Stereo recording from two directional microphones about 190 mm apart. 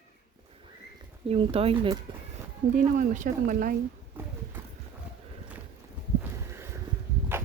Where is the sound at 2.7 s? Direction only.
40° right (ahead or behind).